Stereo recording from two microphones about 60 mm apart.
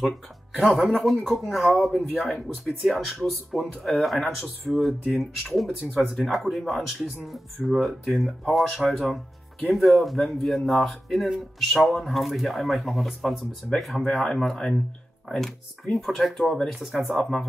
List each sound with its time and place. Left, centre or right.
0.7 s speech: centre
17.1 s speech: centre